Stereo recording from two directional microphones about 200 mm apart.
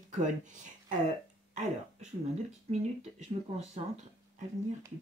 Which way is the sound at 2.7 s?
35° right (ahead or behind).